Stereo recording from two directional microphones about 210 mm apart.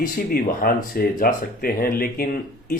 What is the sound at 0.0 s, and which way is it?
Speech, 40° left (ahead or behind).